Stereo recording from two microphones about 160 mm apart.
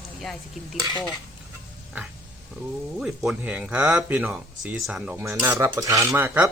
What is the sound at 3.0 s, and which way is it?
Speech, 5° right (ahead or behind).